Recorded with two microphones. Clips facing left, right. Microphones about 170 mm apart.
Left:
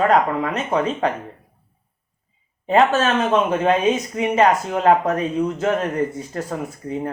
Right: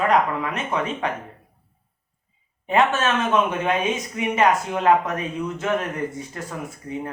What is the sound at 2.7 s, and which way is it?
Speech, 35° left (ahead or behind).